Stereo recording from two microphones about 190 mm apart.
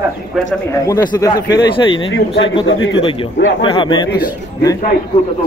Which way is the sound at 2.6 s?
90° left.